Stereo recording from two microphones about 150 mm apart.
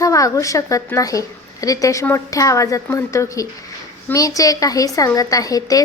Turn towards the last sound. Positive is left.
turn(degrees=25)  # may be behind; listen again after turning